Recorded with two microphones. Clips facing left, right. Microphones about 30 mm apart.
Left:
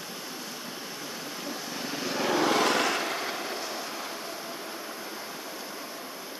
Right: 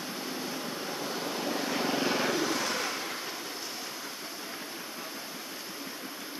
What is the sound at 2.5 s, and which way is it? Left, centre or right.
Vehicle, left.